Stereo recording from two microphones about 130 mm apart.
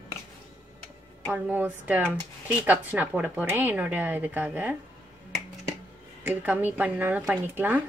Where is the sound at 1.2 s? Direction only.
15° right (ahead or behind).